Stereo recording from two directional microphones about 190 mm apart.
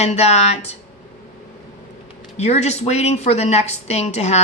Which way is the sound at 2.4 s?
35° left (ahead or behind).